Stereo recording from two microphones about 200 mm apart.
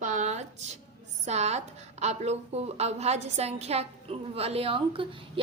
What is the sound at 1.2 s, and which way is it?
A woman's voice, 35° right (ahead or behind).